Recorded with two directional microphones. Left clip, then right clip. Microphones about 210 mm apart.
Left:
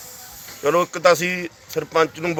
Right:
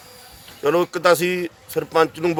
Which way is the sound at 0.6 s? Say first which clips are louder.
Left 1 dB; 15° right (ahead or behind).